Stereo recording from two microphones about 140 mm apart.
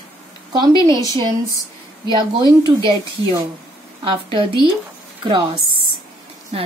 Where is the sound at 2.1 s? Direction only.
35° right (ahead or behind).